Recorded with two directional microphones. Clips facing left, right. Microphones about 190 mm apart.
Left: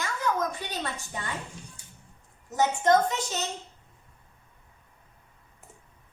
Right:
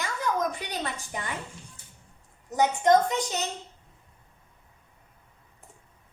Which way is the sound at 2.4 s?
15° right (ahead or behind).